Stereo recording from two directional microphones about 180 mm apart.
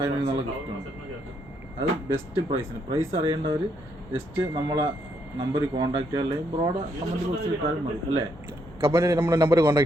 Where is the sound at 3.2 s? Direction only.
25° right (ahead or behind).